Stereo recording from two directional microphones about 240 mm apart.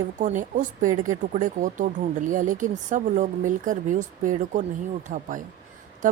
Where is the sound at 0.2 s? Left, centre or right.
Right.